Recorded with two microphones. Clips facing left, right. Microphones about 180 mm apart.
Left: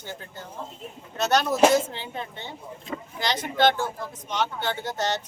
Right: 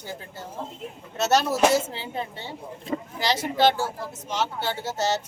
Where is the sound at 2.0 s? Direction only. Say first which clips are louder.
Right 3 dB; 35° right (ahead or behind).